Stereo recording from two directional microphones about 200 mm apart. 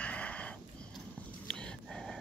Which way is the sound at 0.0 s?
5° left (ahead or behind).